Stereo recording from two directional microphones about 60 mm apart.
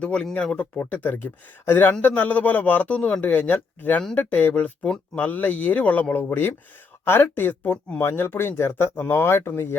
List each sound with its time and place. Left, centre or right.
0.0 s a man's voice: centre
0.9 s a man's voice: left